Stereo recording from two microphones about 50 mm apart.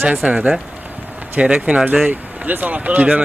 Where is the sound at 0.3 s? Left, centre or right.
Centre.